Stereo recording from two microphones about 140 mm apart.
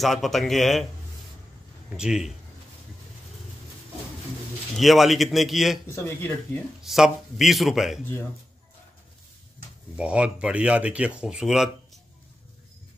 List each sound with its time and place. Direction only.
0.0 s speech: centre (ahead or behind)
2.0 s speech: 5° right (ahead or behind)
4.7 s speech: centre (ahead or behind)
5.9 s speech: 15° left (ahead or behind)
6.8 s speech: centre (ahead or behind)
9.9 s speech: 10° right (ahead or behind)